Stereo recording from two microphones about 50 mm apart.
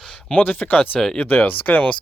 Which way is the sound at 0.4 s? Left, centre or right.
Left.